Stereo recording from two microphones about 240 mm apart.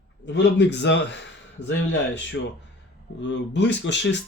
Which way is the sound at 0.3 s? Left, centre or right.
Left.